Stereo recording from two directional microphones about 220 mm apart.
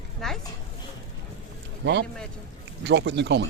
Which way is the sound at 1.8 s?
55° right (ahead or behind).